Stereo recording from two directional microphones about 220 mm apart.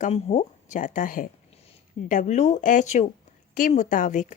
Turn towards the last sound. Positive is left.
turn(degrees=35)  # may be behind; listen again after turning